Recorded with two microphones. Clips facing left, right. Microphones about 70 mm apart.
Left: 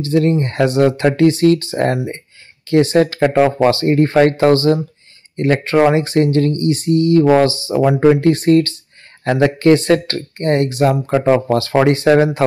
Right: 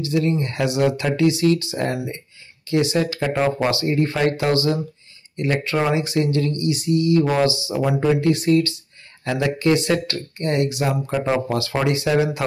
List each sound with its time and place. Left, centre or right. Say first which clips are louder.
0.0 s speech: left 6 dB; left
3.5 s speech: left 7 dB; left